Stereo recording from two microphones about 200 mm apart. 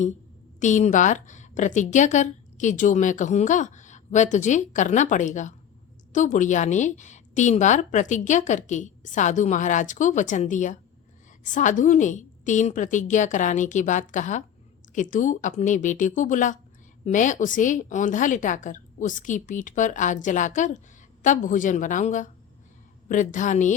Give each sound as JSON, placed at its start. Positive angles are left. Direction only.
{"t": 0.6, "sound": "a woman's voice", "side_deg": 35}